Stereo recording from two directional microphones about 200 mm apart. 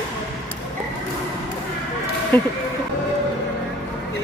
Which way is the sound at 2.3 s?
10° left (ahead or behind).